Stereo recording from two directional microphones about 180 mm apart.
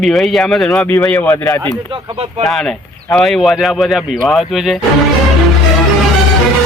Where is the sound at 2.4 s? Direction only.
Centre (ahead or behind).